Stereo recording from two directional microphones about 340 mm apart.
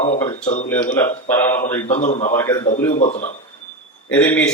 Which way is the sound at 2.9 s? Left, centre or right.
Left.